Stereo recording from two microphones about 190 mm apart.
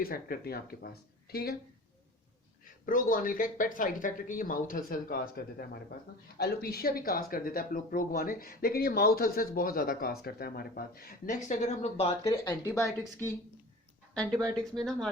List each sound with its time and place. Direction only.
0.0 s speech: 50° left (ahead or behind)
2.8 s speech: 45° left (ahead or behind)
11.4 s speech: 40° left (ahead or behind)
12.2 s speech: 15° left (ahead or behind)